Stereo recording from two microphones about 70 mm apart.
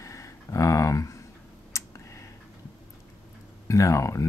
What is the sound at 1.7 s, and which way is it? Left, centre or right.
Clicking, left.